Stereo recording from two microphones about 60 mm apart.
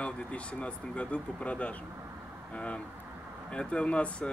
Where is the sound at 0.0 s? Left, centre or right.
Centre.